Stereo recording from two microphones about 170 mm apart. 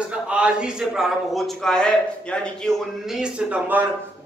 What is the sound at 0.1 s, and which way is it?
A man's voice, 5° right (ahead or behind).